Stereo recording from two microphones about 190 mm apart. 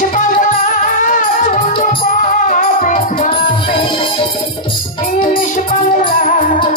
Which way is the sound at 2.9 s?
30° left (ahead or behind).